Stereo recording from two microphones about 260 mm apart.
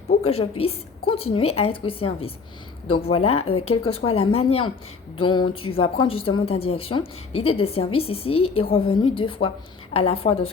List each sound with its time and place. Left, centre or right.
0.3 s a woman's voice: left